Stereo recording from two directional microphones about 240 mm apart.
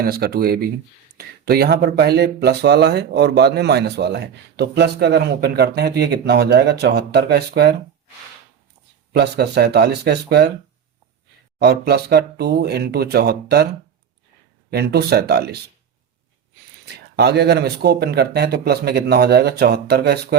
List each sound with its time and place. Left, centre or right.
0.0 s speech: right
9.1 s speech: right
11.6 s speech: right
14.7 s speech: right
16.8 s speech: right